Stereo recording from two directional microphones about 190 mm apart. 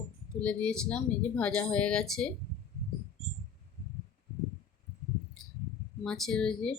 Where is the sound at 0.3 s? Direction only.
5° left (ahead or behind).